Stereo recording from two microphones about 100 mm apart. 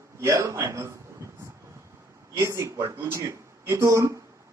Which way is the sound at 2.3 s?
30° right (ahead or behind).